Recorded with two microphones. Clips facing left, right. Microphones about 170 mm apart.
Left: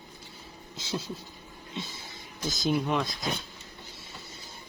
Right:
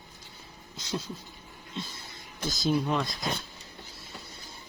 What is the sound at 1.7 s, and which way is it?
Speech, centre (ahead or behind).